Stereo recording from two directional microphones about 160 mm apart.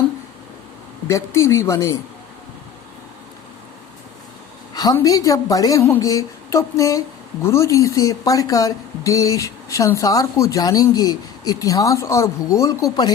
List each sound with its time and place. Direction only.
1.0 s speech: 15° left (ahead or behind)
4.7 s a sound: 25° left (ahead or behind)
4.9 s speech: 20° left (ahead or behind)